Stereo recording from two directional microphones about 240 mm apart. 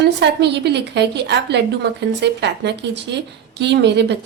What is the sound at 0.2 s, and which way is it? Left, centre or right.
A woman's voice, right.